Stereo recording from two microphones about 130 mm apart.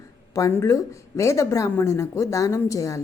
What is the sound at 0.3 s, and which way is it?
A woman's voice, 25° left (ahead or behind).